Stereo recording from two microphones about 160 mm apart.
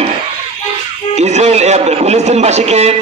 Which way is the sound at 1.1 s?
45° right (ahead or behind).